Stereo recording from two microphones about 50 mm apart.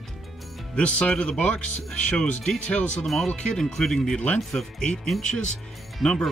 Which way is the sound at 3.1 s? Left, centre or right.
Centre.